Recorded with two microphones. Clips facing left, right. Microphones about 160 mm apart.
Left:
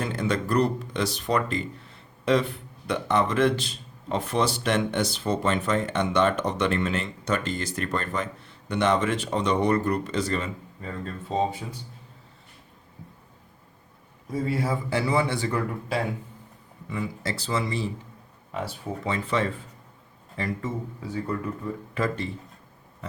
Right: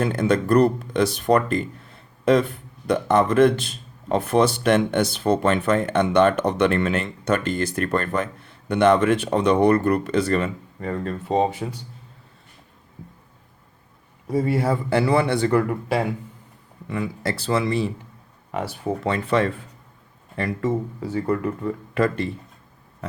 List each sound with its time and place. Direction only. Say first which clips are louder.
0.0 s speech: right 6 dB; 55° right (ahead or behind); by 11.4 s 70° right (ahead or behind)
14.3 s speech: right 6 dB; 70° right (ahead or behind)
21.1 s speech: right 6 dB; 75° right (ahead or behind)
21.9 s speech: right 6 dB; 65° right (ahead or behind)